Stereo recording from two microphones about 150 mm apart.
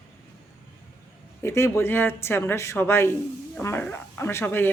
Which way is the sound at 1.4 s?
15° left (ahead or behind).